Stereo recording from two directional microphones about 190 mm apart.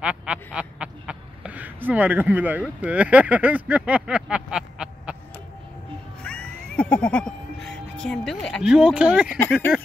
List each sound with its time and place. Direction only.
0.0 s speech: 5° right (ahead or behind)
6.2 s music: 5° left (ahead or behind)
9.7 s a sound: 5° right (ahead or behind)